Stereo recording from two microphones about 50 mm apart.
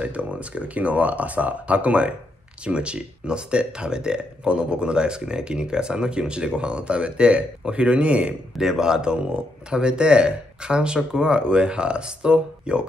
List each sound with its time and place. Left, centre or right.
0.0 s speech: right